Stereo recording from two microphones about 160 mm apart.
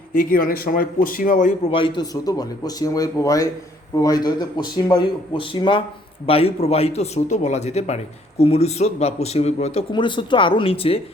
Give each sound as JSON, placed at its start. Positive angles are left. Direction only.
{"t": 0.2, "sound": "speech", "side_deg": 60}
{"t": 1.7, "sound": "speech", "side_deg": 30}
{"t": 9.9, "sound": "speech", "side_deg": 30}